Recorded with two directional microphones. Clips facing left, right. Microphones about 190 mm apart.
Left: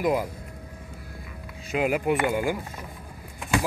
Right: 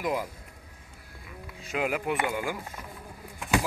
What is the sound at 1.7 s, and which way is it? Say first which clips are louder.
Speech: left 5 dB; 10° left (ahead or behind).